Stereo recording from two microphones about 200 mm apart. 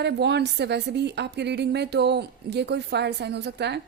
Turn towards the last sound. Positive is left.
turn(degrees=-55)  # may be behind; listen again after turning